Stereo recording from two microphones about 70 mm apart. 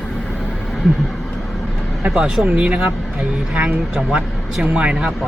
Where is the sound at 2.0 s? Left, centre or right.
Centre.